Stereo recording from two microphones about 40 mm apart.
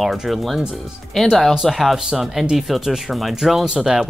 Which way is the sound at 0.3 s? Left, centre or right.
Centre.